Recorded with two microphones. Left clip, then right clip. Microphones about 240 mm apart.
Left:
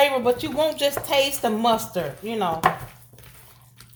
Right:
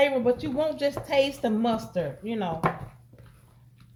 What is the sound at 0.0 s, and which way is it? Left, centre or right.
A woman's voice, centre.